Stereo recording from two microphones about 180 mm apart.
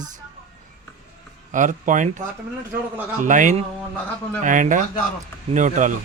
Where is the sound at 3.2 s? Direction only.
45° right (ahead or behind).